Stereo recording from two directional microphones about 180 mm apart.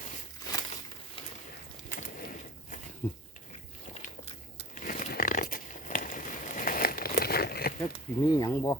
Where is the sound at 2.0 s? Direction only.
50° left (ahead or behind).